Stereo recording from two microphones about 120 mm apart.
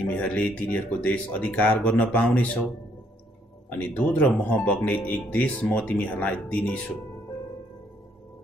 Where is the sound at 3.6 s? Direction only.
10° left (ahead or behind).